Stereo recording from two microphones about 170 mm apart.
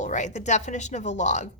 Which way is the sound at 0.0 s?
45° left (ahead or behind).